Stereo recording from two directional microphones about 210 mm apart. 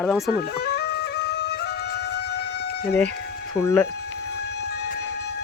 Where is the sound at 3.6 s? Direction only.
15° left (ahead or behind).